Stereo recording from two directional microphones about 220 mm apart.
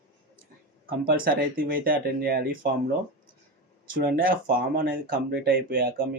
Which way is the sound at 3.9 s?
40° right (ahead or behind).